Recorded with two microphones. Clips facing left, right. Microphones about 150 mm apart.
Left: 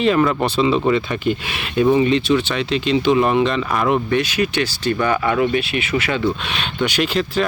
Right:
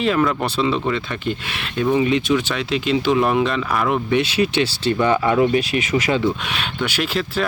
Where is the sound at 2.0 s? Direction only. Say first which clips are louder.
Left 2 dB; 5° right (ahead or behind).